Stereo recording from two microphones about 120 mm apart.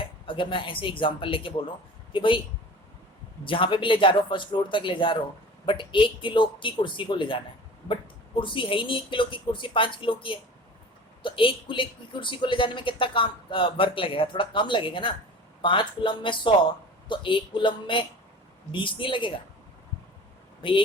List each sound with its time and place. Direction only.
0.0 s speech: 45° left (ahead or behind)
3.4 s speech: 45° left (ahead or behind)
8.4 s speech: 45° left (ahead or behind)
20.6 s speech: 45° left (ahead or behind)